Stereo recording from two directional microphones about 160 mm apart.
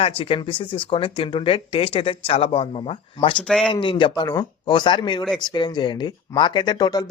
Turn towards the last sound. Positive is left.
turn(degrees=25)  # may be behind; listen again after turning